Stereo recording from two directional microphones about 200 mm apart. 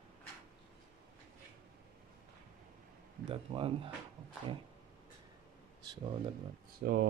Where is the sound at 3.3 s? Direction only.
25° right (ahead or behind).